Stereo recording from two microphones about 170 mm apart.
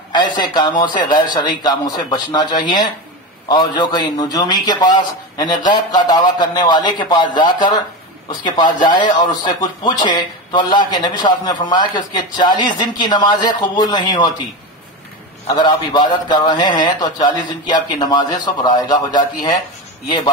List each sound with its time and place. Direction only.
0.1 s speech: 25° left (ahead or behind)
15.5 s speech: 25° left (ahead or behind)